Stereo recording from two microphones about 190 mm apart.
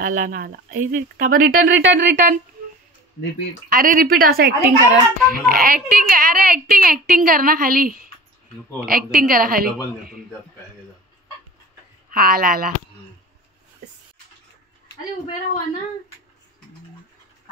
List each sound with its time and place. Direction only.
0.0 s speech: 45° right (ahead or behind)
1.7 s speech: 75° right (ahead or behind)
3.7 s speech: 45° right (ahead or behind)
12.1 s speech: 50° right (ahead or behind)